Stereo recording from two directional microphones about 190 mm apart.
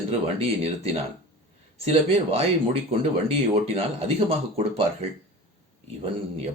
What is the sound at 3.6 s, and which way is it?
Speech, 30° right (ahead or behind).